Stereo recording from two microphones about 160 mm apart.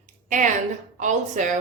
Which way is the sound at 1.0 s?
50° right (ahead or behind).